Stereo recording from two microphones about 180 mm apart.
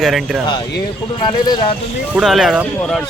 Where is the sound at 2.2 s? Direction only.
5° right (ahead or behind).